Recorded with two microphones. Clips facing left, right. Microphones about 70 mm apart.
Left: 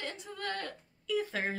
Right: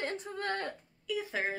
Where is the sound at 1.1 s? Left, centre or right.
Centre.